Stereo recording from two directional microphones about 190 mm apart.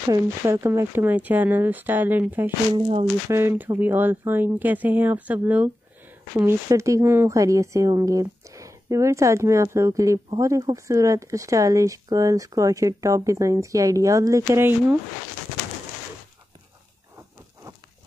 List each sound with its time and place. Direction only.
0.1 s a woman's voice: 15° right (ahead or behind)
2.7 s speech: 25° right (ahead or behind)
3.3 s a woman's voice: 15° right (ahead or behind)